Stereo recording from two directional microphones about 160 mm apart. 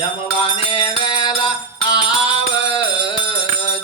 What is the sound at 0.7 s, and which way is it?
Music, 30° left (ahead or behind).